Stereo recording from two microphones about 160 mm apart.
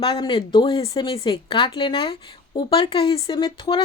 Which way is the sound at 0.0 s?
35° left (ahead or behind).